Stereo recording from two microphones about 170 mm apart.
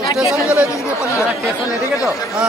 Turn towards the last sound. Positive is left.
turn(degrees=20)  # may be behind; listen again after turning